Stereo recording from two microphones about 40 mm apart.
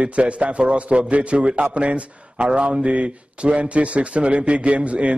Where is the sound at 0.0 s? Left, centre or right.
Right.